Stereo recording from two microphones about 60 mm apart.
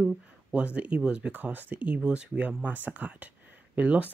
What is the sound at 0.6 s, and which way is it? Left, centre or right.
Speech, centre.